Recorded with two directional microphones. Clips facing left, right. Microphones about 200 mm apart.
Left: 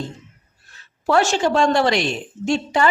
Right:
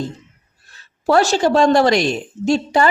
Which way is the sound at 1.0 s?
35° right (ahead or behind).